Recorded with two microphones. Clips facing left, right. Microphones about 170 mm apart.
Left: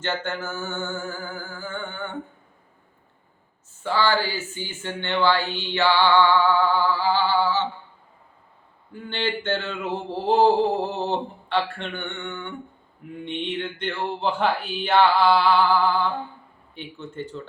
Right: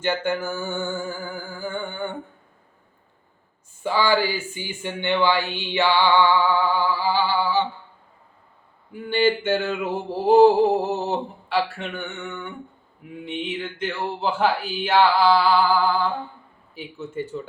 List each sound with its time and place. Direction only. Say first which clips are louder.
0.0 s speech: right 4 dB; 10° right (ahead or behind)
3.8 s speech: right 2 dB; 15° right (ahead or behind)
8.9 s speech: right 7 dB; 10° right (ahead or behind)